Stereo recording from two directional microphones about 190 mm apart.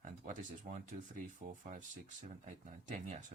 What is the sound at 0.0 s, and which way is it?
Speech, 40° right (ahead or behind).